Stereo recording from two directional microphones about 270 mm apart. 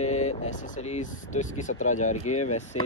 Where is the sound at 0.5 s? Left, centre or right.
Left.